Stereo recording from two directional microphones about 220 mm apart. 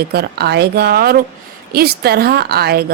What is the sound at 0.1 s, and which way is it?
A woman's voice, 45° right (ahead or behind).